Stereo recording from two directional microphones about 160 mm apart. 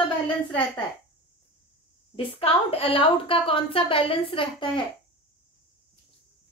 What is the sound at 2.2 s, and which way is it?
A woman's voice, 35° left (ahead or behind).